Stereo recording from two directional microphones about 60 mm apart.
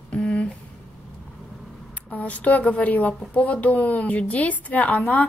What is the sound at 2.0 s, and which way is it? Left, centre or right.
A woman's voice, left.